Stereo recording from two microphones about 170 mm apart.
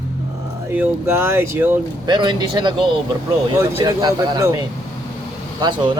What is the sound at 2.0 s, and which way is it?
Speech, 25° right (ahead or behind).